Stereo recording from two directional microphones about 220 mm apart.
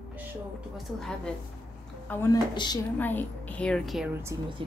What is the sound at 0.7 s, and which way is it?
Speech, centre (ahead or behind).